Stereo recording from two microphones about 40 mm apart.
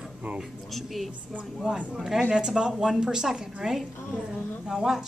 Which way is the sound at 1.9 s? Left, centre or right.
Centre.